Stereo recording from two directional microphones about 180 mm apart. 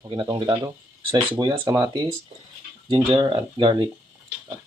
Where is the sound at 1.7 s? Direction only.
20° right (ahead or behind).